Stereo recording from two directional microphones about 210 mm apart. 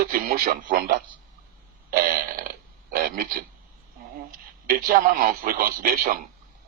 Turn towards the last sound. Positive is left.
turn(degrees=-40)  # may be behind; listen again after turning